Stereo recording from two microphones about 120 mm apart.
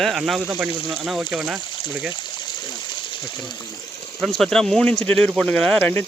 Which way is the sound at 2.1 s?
35° left (ahead or behind).